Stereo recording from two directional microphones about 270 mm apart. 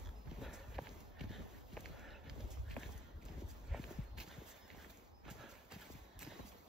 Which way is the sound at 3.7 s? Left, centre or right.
Centre.